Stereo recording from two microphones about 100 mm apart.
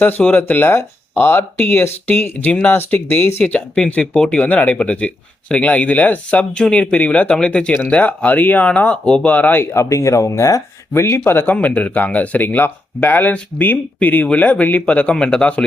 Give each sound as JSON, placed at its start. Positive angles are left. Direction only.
{"t": 0.2, "sound": "speech", "side_deg": 20}